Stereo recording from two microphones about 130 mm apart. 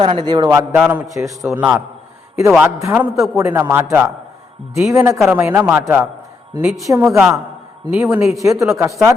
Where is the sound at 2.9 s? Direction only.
10° right (ahead or behind).